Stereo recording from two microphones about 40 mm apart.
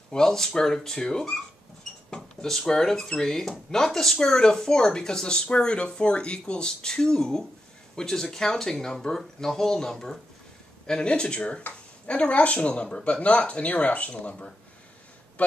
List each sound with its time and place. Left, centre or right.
0.1 s speech: centre
2.4 s speech: centre; by 14.3 s left